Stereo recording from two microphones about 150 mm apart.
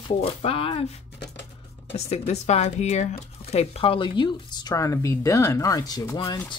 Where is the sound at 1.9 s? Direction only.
45° left (ahead or behind).